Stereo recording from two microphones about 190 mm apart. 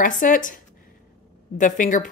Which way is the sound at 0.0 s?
45° left (ahead or behind).